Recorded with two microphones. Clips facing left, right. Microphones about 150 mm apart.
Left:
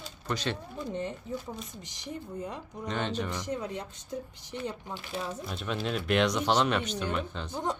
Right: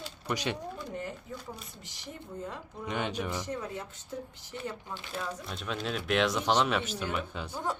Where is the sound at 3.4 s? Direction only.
15° left (ahead or behind).